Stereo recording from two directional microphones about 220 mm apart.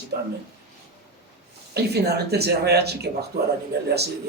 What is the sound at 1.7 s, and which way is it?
A man's voice, 45° right (ahead or behind).